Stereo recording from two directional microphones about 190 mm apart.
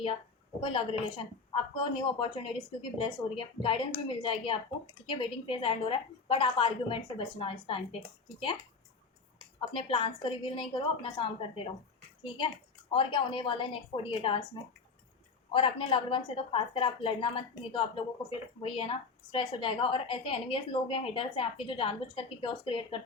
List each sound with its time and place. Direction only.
0.7 s a woman's voice: 30° left (ahead or behind)
9.6 s a woman's voice: 25° left (ahead or behind)
12.9 s a woman's voice: 25° left (ahead or behind)